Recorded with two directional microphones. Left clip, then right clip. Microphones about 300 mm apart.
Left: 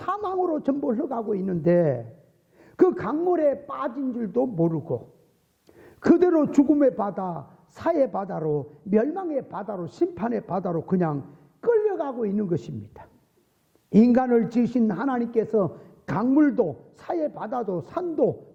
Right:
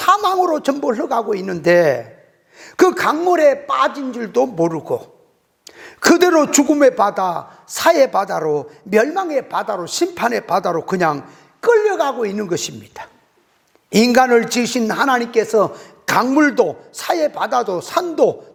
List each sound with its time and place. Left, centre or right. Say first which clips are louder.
0.0 s a sound: right 13 dB; centre
0.5 s a man's voice: right 8 dB; centre; by 5.0 s right
5.6 s a man's voice: right 7 dB; centre